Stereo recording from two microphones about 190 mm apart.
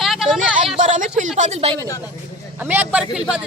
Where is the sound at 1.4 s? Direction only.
35° right (ahead or behind).